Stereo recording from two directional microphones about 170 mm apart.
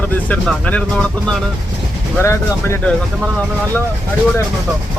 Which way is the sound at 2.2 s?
15° left (ahead or behind).